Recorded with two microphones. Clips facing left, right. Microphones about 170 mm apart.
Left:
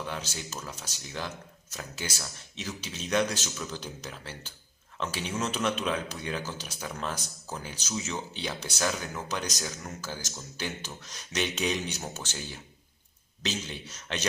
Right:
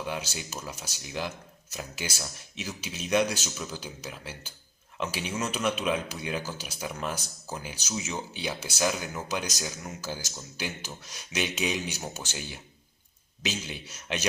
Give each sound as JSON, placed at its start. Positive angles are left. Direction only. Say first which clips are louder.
{"t": 0.0, "sound": "a man's voice", "louder": "right 2 dB", "side_deg": -10}